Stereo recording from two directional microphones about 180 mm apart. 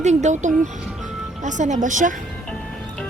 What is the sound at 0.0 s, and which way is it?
A woman's voice, 40° right (ahead or behind).